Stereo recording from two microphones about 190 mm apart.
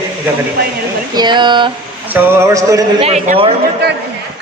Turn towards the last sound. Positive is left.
turn(degrees=-35)  # may be behind; listen again after turning